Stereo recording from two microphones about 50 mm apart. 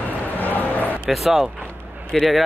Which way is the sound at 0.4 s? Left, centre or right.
Left.